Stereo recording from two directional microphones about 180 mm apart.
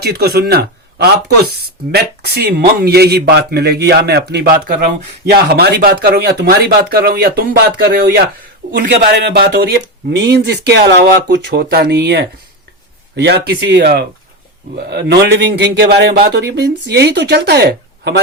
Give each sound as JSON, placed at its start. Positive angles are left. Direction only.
{"t": 0.0, "sound": "a man's voice", "side_deg": -60}